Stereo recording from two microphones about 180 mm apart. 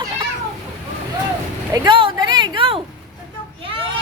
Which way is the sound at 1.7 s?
25° right (ahead or behind).